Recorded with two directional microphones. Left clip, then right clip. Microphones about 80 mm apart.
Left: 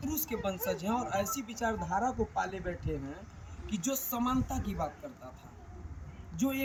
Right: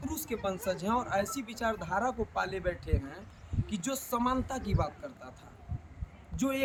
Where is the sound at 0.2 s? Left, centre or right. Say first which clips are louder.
Right 1 dB; right.